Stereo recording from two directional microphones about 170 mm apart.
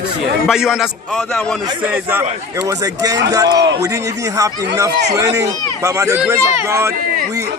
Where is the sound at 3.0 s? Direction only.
20° right (ahead or behind).